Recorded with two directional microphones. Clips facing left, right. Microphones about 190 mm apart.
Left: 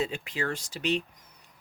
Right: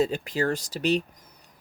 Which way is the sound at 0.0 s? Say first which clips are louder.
Right 6 dB; 40° right (ahead or behind).